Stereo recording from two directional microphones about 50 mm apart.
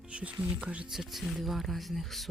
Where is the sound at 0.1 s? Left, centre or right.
Right.